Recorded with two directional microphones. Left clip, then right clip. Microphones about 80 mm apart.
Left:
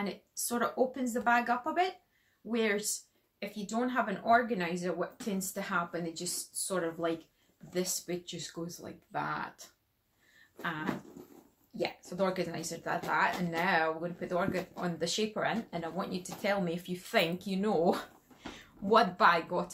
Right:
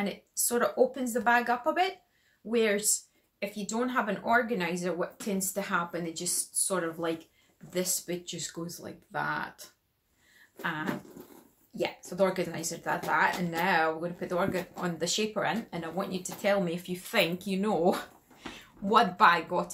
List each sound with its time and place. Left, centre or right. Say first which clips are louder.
0.0 s speech: right 4 dB; right